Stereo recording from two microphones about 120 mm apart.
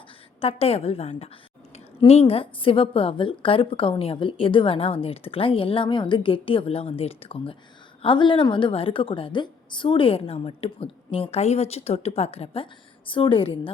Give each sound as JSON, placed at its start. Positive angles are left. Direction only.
{"t": 0.4, "sound": "a woman's voice", "side_deg": 55}
{"t": 13.1, "sound": "a woman's voice", "side_deg": 45}